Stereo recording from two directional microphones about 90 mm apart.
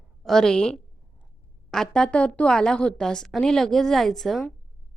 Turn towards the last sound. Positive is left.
turn(degrees=0)  # may be behind; listen again after turning